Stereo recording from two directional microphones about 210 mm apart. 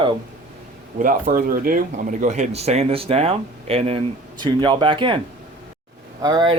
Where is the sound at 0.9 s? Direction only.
40° right (ahead or behind).